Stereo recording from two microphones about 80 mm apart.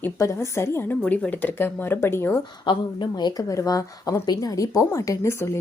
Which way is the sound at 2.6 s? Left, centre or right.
Left.